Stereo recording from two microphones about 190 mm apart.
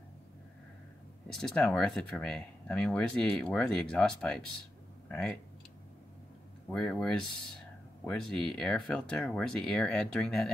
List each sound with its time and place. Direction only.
1.3 s speech: 5° left (ahead or behind)
6.7 s speech: 5° left (ahead or behind)